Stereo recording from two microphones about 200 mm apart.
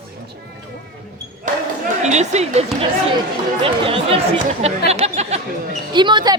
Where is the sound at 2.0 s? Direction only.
35° right (ahead or behind).